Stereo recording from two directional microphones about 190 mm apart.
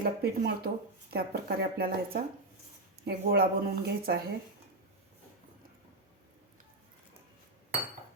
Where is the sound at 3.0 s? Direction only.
65° right (ahead or behind).